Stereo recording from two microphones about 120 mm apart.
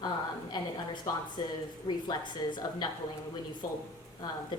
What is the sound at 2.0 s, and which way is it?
Speech, 40° left (ahead or behind).